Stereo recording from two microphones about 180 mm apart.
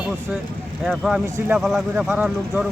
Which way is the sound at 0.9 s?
Centre (ahead or behind).